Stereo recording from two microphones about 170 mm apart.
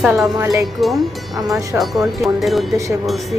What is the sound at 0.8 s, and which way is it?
Speech, centre (ahead or behind).